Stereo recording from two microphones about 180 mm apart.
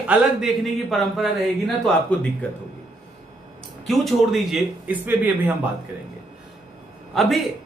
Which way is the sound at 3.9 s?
Centre (ahead or behind).